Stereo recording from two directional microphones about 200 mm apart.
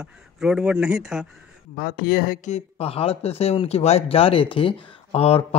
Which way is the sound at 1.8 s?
50° left (ahead or behind).